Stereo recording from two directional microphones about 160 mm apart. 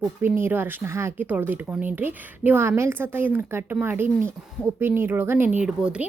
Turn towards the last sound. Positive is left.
turn(degrees=-5)  # may be behind; listen again after turning